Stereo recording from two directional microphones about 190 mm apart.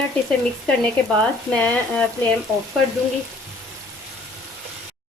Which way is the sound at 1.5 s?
5° left (ahead or behind).